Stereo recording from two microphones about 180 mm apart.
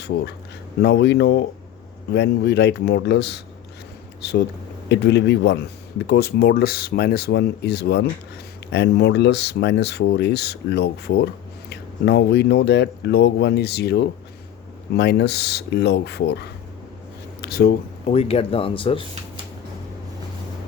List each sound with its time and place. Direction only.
0.8 s speech: 70° left (ahead or behind)
18.0 s speech: 35° left (ahead or behind)